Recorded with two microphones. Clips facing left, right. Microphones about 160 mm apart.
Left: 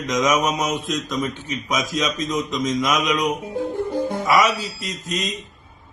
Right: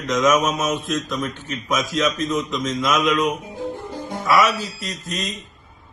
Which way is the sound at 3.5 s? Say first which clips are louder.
Left 6 dB; 55° left (ahead or behind).